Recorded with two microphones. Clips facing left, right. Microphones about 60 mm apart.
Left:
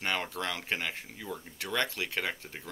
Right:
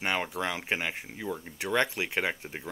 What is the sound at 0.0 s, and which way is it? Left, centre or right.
Speech, centre.